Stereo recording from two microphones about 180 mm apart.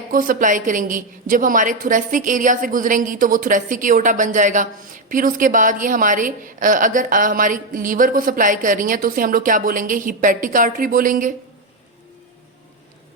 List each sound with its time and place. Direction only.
0.1 s a woman's voice: 50° right (ahead or behind)